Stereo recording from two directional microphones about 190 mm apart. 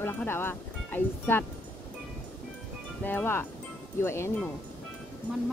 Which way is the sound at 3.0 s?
10° left (ahead or behind).